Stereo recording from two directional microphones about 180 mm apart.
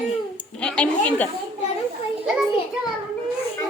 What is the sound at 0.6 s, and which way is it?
Speech, 5° left (ahead or behind).